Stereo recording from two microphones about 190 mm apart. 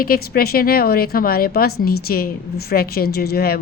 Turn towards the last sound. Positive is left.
turn(degrees=55)  # may be behind; listen again after turning